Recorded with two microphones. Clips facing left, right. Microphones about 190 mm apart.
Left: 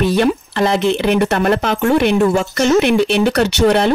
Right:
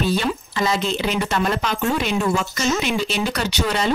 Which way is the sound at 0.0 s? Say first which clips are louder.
Left 7 dB; 65° left (ahead or behind).